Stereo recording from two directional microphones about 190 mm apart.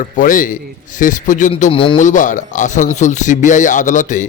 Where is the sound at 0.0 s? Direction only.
45° left (ahead or behind).